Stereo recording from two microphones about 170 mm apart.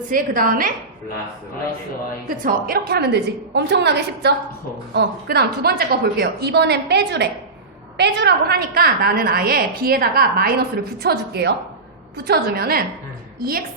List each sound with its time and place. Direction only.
0.1 s a woman's voice: 55° right (ahead or behind)
2.4 s a woman's voice: 60° right (ahead or behind); by 4.4 s 80° right
4.9 s a woman's voice: 70° right (ahead or behind)